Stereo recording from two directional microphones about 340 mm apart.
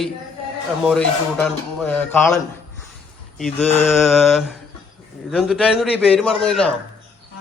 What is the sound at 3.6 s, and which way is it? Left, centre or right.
Mantra, centre.